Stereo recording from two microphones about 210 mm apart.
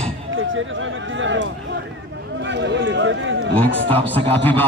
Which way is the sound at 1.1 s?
65° right (ahead or behind).